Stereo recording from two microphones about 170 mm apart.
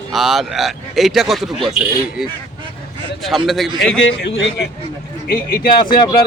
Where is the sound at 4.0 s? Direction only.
90° left.